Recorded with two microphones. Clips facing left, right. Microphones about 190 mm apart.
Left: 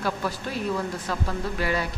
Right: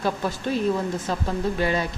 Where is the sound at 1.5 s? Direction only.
25° right (ahead or behind).